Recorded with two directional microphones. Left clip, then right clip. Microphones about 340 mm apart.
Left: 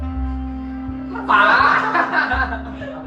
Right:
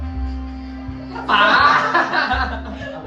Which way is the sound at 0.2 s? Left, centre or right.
Centre.